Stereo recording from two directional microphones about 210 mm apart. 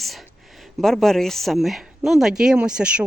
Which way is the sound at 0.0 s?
Centre (ahead or behind).